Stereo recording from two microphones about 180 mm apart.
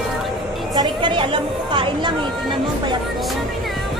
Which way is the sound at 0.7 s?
25° right (ahead or behind).